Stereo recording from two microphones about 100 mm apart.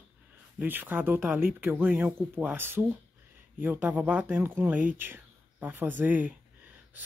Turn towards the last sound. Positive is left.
turn(degrees=-15)  # may be behind; listen again after turning